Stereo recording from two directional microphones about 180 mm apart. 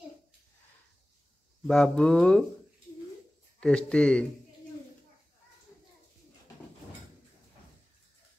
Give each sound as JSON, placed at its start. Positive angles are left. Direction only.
{"t": 1.7, "sound": "speech", "side_deg": 0}
{"t": 3.6, "sound": "speech", "side_deg": 5}